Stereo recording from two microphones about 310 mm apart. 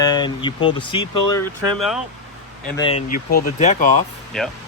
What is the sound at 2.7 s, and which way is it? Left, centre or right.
Speech, centre.